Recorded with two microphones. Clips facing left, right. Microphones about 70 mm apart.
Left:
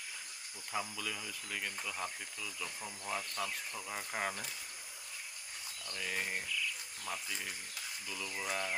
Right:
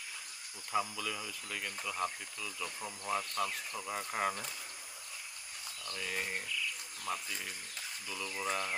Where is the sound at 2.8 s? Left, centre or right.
Centre.